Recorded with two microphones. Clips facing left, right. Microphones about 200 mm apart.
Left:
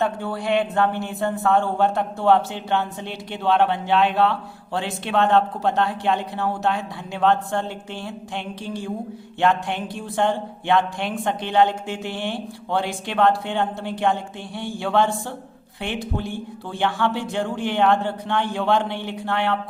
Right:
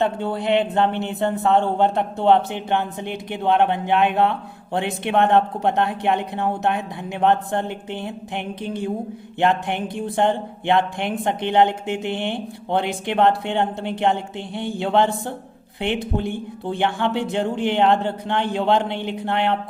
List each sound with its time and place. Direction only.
0.0 s speech: 20° right (ahead or behind)
16.1 s speech: 20° right (ahead or behind)